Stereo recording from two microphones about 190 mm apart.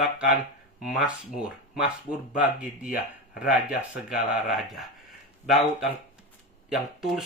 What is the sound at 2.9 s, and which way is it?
Speech, 50° left (ahead or behind).